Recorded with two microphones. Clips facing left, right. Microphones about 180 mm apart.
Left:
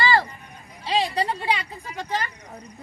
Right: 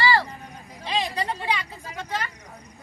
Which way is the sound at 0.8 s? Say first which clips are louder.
Left 4 dB; 35° left (ahead or behind).